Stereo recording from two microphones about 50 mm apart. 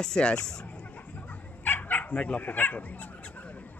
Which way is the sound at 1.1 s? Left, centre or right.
Left.